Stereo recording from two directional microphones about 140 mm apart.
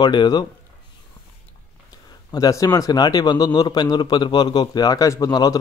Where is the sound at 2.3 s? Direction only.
25° left (ahead or behind).